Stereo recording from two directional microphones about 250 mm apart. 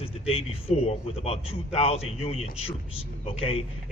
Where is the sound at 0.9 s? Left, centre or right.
Left.